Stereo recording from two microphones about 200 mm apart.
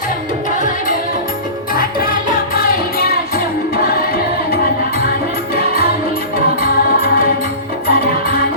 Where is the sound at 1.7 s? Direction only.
45° left (ahead or behind).